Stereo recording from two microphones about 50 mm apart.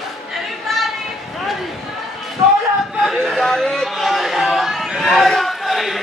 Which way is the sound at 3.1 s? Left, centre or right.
Centre.